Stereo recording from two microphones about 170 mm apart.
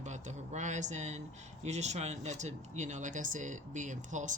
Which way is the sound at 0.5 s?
45° right (ahead or behind).